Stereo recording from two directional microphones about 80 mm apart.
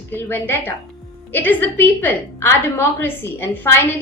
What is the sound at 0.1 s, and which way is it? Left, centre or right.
A woman's voice, left.